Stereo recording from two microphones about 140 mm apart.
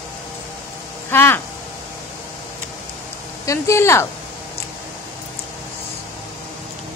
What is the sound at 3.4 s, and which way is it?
Speech, 20° left (ahead or behind).